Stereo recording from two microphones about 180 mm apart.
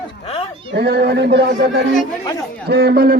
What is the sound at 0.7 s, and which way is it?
Speech, 65° right (ahead or behind).